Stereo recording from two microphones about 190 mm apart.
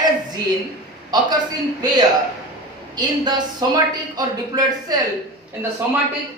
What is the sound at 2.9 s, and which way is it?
A woman's voice, 20° right (ahead or behind).